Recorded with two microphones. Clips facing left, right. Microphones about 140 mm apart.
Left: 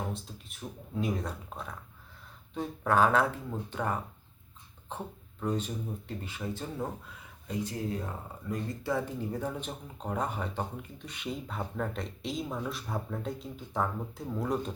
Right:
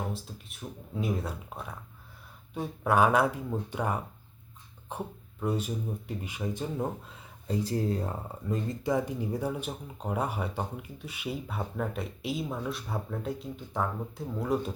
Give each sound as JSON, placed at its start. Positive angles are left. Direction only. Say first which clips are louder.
{"t": 0.1, "sound": "speech", "louder": "right 1 dB", "side_deg": 0}
{"t": 7.4, "sound": "speech", "louder": "right 5 dB", "side_deg": -35}